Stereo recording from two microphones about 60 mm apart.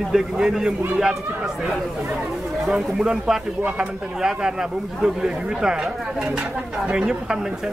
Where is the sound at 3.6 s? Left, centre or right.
Centre.